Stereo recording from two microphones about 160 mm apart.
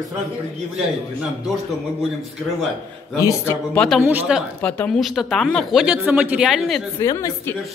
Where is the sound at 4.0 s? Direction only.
10° right (ahead or behind).